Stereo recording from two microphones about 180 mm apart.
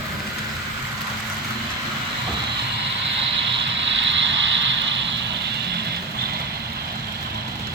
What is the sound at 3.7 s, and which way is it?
Vehicle, 90° right.